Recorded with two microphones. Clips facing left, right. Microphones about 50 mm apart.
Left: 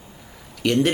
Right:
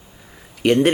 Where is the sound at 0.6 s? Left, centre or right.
Right.